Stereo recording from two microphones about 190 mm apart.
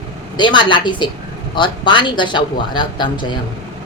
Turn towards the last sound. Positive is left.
turn(degrees=25)  # may be behind; listen again after turning